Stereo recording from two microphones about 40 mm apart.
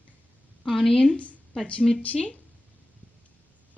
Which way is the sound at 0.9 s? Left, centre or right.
Left.